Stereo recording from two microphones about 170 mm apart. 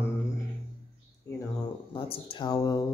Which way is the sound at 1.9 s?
30° left (ahead or behind).